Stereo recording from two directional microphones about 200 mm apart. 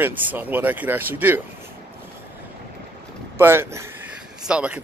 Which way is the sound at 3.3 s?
10° right (ahead or behind).